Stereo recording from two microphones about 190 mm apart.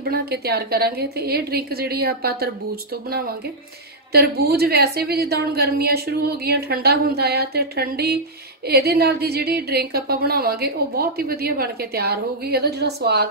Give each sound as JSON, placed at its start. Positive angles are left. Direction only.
{"t": 0.1, "sound": "speech", "side_deg": -55}